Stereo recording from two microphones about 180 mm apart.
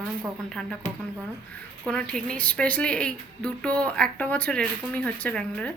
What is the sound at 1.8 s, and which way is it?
A woman's voice, 5° left (ahead or behind).